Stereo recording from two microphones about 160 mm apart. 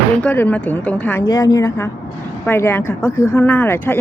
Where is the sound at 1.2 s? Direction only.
20° left (ahead or behind).